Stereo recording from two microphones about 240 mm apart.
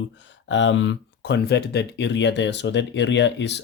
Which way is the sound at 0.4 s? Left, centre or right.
Left.